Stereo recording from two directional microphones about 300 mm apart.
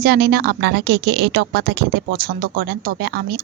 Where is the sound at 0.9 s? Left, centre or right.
Right.